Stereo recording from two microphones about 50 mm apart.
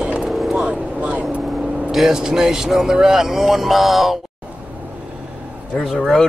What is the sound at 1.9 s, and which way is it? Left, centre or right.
Speech, centre.